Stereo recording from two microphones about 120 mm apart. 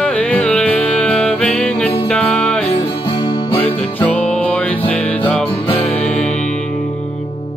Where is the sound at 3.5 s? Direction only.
10° left (ahead or behind).